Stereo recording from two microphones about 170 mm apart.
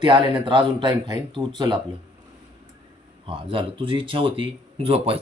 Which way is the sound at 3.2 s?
30° right (ahead or behind).